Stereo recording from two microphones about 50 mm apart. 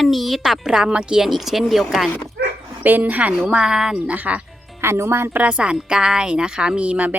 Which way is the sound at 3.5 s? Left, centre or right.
Centre.